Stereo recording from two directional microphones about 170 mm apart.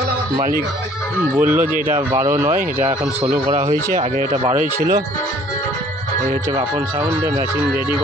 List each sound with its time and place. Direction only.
1.4 s speech: 10° right (ahead or behind)
3.7 s speech: 50° right (ahead or behind)
4.7 s speech: 20° right (ahead or behind)